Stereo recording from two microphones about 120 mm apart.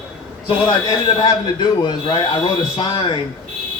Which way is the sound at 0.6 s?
40° left (ahead or behind).